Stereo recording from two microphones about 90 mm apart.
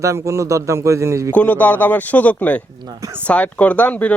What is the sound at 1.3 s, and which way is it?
Speech, 15° left (ahead or behind).